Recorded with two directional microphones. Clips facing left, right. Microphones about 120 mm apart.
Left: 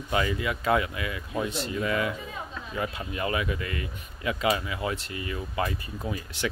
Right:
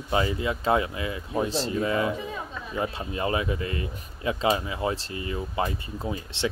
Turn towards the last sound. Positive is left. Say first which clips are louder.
# right 2 dB
turn(degrees=-25)  # may be behind; listen again after turning